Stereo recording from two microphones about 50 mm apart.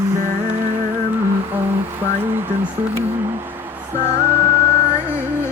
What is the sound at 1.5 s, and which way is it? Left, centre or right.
Speech, right.